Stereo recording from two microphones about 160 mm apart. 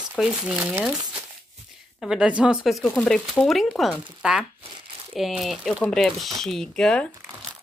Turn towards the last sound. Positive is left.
turn(degrees=5)  # may be behind; listen again after turning